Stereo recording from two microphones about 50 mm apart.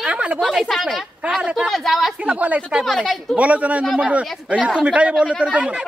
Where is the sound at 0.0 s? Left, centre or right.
Right.